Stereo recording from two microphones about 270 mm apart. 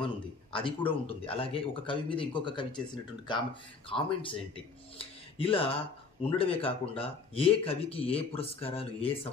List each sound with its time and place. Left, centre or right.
0.0 s speech: centre